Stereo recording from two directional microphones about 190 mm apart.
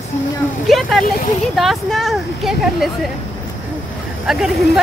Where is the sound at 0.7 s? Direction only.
Centre (ahead or behind).